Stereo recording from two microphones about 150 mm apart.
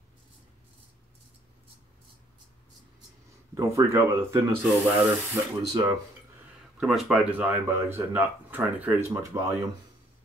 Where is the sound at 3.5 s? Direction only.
20° right (ahead or behind).